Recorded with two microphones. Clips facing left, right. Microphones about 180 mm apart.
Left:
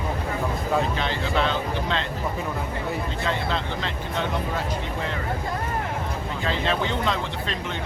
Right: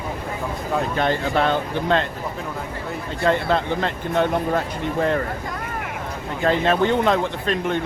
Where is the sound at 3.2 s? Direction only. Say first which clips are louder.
Right 11 dB; 55° right (ahead or behind).